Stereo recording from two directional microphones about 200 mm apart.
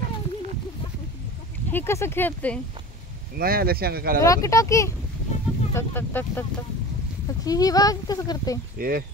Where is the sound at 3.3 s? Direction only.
45° right (ahead or behind).